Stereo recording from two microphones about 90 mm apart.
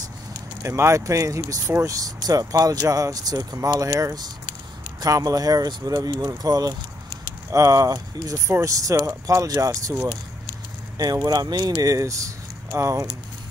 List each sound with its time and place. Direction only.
0.6 s speech: 30° right (ahead or behind)
11.2 s speech: 50° right (ahead or behind)